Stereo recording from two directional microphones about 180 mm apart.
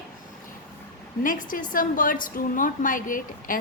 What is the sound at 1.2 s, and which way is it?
A woman's voice, 50° left (ahead or behind).